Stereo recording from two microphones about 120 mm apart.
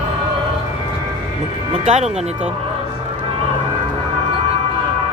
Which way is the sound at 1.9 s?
70° right (ahead or behind).